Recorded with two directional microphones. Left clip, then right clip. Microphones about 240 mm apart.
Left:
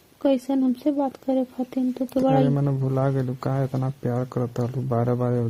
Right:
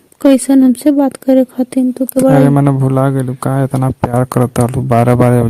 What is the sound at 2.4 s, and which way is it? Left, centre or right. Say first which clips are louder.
Speech: right 13 dB; right.